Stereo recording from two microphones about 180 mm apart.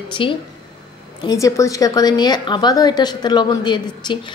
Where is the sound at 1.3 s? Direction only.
20° left (ahead or behind).